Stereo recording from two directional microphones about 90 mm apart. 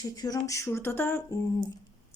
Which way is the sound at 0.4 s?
35° left (ahead or behind).